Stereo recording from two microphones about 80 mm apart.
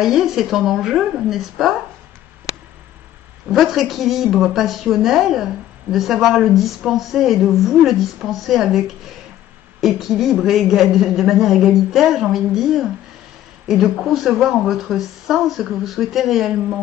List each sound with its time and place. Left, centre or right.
0.0 s a woman's voice: centre
3.4 s a woman's voice: centre